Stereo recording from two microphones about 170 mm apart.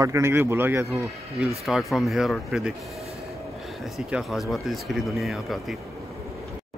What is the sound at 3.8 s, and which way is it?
Speech, centre (ahead or behind).